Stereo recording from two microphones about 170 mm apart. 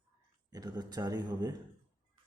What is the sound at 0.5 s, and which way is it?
A man's voice, 25° right (ahead or behind).